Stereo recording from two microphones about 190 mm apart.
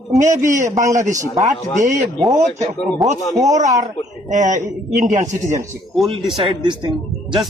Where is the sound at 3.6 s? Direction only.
40° right (ahead or behind).